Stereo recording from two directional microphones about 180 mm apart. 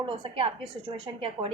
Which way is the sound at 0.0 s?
30° right (ahead or behind).